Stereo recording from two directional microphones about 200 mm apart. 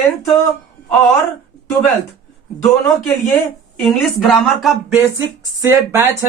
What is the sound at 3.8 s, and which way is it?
Speech, centre (ahead or behind).